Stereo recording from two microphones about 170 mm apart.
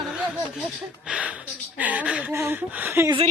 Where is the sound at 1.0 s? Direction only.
5° right (ahead or behind).